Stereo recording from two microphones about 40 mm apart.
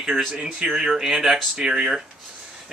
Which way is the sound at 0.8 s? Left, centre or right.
Centre.